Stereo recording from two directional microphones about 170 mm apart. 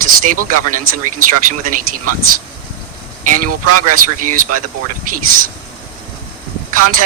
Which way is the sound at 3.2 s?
50° right (ahead or behind).